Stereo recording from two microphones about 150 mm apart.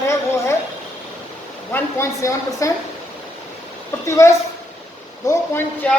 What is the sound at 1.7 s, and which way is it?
A woman's voice, 20° left (ahead or behind).